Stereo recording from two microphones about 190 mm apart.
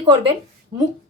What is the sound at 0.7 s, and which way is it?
Speech, 50° right (ahead or behind).